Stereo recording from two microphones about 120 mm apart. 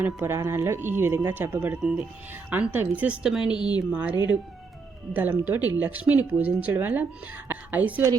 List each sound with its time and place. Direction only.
0.0 s a woman's voice: 20° right (ahead or behind)
3.4 s a woman's voice: 40° left (ahead or behind)
5.1 s a woman's voice: 15° right (ahead or behind)